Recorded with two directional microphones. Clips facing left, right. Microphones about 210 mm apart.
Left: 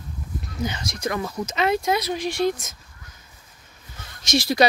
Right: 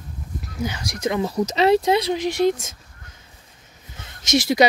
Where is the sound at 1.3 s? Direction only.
35° right (ahead or behind).